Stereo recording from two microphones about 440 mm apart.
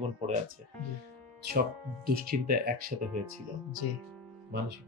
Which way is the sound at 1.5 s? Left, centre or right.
Right.